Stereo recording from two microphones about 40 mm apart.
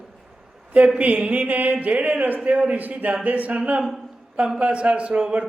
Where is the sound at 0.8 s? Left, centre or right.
Right.